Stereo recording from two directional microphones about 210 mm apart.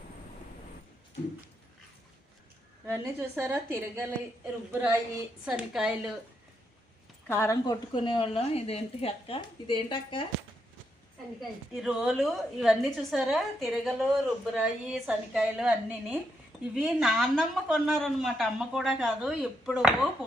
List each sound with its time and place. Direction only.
2.8 s a woman's voice: 10° right (ahead or behind)
7.3 s a woman's voice: 15° left (ahead or behind)
11.3 s a woman's voice: centre (ahead or behind)